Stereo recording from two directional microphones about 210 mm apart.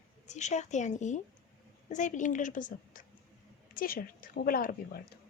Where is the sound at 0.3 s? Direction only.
35° left (ahead or behind).